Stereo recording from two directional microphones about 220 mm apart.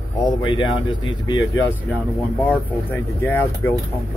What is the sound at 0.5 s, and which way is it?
Speech, 20° left (ahead or behind).